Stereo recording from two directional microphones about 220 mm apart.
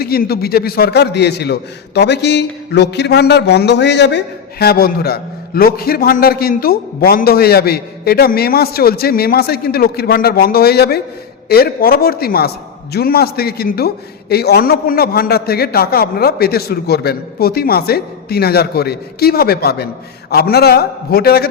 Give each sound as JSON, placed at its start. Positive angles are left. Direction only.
{"t": 0.0, "sound": "a man's voice", "side_deg": 45}